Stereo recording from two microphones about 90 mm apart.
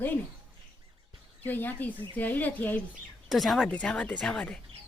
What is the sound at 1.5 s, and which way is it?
Speech, 20° left (ahead or behind).